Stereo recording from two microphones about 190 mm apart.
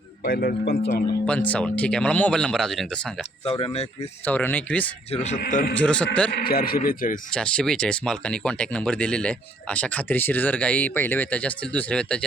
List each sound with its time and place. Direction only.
0.3 s speech: 50° left (ahead or behind)
1.3 s speech: 5° left (ahead or behind)
3.4 s speech: 30° left (ahead or behind)
4.3 s speech: 10° left (ahead or behind)
5.1 s speech: 35° left (ahead or behind)
5.8 s speech: 5° left (ahead or behind)
6.4 s speech: 50° left (ahead or behind)
7.3 s speech: 5° left (ahead or behind)